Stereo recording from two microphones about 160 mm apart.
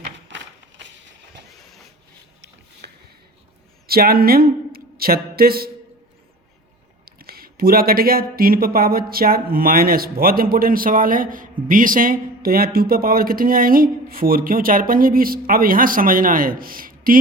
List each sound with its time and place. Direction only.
2.8 s a sound: 90° right
3.8 s speech: 70° right (ahead or behind)
7.0 s speech: 70° right (ahead or behind)